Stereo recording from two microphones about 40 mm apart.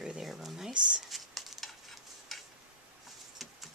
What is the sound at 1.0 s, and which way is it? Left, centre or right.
Stir, centre.